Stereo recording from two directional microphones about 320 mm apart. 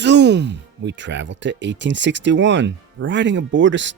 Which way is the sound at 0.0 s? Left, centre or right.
Right.